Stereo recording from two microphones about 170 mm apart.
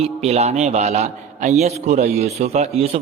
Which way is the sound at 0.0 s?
40° right (ahead or behind).